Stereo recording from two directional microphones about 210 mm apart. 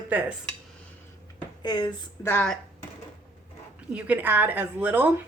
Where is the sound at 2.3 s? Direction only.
5° left (ahead or behind).